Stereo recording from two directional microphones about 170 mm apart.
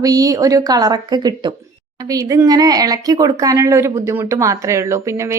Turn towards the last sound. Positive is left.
turn(degrees=-15)  # may be behind; listen again after turning